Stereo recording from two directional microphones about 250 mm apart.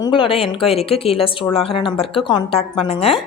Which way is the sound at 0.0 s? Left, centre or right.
Left.